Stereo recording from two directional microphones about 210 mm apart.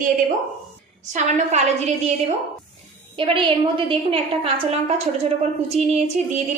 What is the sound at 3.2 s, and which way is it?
A woman's voice, 25° right (ahead or behind).